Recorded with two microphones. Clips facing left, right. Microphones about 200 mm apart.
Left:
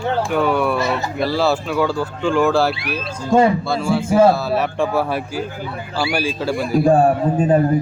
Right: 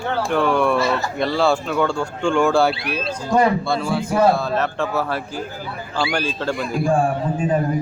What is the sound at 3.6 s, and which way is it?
Speech, centre (ahead or behind).